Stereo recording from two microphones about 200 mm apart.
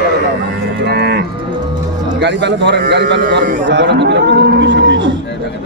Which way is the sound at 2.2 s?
60° right (ahead or behind).